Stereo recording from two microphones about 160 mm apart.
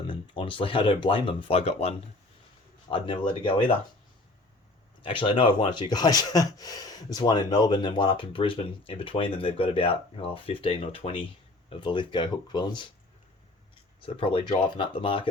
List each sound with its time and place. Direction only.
0.1 s speech: 30° left (ahead or behind)
5.0 s speech: 30° left (ahead or behind)
14.0 s speech: 35° left (ahead or behind)